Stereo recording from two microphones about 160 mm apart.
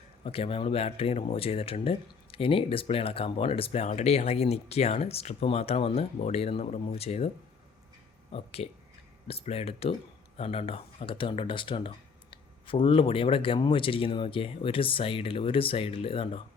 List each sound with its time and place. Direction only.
0.3 s speech: 35° left (ahead or behind)
8.3 s speech: 40° left (ahead or behind)